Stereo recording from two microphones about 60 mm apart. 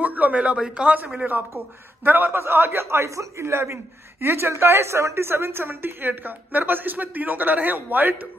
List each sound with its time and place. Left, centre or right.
0.0 s a sound: right
0.8 s a man's voice: right
2.0 s a man's voice: right